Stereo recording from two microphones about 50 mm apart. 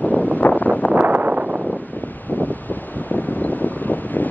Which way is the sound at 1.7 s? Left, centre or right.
Left.